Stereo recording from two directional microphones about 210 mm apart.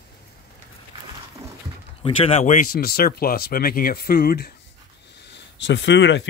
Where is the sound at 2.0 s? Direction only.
30° left (ahead or behind).